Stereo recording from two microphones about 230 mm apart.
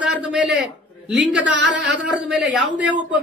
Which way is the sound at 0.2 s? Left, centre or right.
Centre.